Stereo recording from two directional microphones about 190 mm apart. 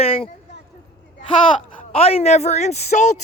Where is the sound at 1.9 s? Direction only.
30° left (ahead or behind).